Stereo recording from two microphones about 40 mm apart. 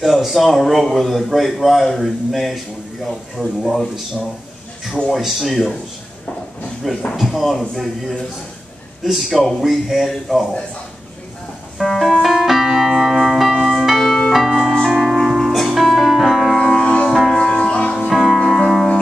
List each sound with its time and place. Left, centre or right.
0.0 s a man's voice: centre
5.1 s a man's voice: centre
6.8 s a man's voice: centre
9.0 s a man's voice: centre
11.8 s piano: centre
13.6 s music: centre
16.5 s music: centre
16.8 s music: left
17.1 s music: centre
17.4 s music: centre
17.7 s music: left
18.1 s music: centre